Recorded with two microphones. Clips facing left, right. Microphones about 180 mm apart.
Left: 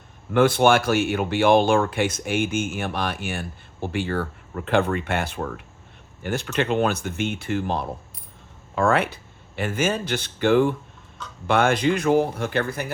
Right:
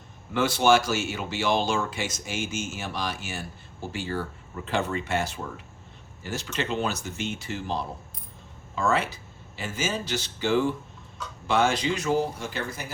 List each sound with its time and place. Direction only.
0.3 s speech: 55° left (ahead or behind)